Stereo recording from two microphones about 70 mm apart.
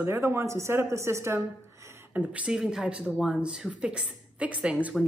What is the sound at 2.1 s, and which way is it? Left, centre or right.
Speech, centre.